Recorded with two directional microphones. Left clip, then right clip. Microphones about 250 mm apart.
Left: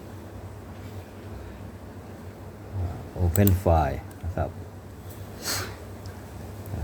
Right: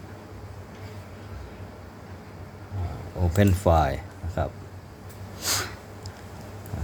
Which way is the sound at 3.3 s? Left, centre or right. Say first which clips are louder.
Right 2 dB; centre.